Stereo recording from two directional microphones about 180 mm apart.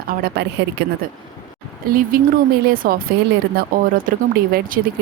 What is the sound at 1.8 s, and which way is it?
A woman's voice, 50° right (ahead or behind).